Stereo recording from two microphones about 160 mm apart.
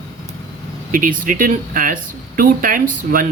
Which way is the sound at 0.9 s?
60° right (ahead or behind).